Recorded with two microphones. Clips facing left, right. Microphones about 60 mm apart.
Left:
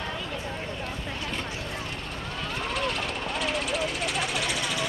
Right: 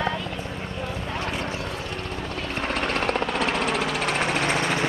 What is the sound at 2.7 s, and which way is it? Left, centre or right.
Vehicle, right.